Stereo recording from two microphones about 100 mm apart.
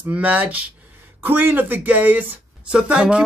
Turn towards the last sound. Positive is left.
turn(degrees=-10)  # may be behind; listen again after turning